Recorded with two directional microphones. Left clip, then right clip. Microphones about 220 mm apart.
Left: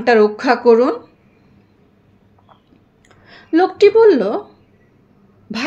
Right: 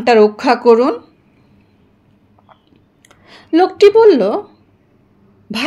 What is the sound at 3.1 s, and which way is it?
Speech, 30° right (ahead or behind).